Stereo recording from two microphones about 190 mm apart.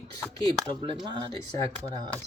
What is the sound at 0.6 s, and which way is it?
Speech, 25° right (ahead or behind).